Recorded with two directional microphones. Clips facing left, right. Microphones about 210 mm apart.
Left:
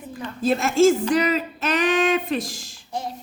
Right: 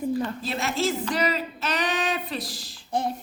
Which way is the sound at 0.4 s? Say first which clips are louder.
Left 10 dB; 50° left (ahead or behind).